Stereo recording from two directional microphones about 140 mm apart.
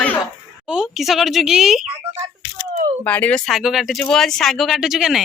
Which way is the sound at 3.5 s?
Centre (ahead or behind).